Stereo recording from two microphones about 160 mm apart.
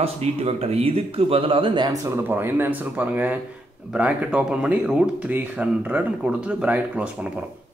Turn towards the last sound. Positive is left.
turn(degrees=-5)  # may be behind; listen again after turning